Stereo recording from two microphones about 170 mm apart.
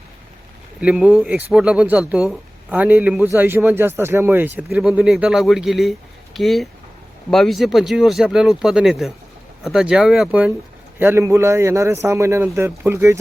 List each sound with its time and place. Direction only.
0.8 s speech: 5° right (ahead or behind)